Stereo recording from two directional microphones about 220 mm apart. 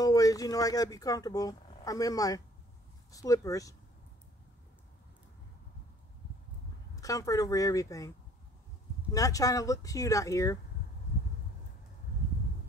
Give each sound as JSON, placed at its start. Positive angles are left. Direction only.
{"t": 0.0, "sound": "speech", "side_deg": 15}
{"t": 7.0, "sound": "speech", "side_deg": 15}
{"t": 9.1, "sound": "speech", "side_deg": 15}